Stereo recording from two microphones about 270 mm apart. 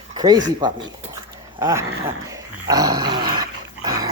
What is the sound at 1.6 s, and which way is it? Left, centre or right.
Speech, centre.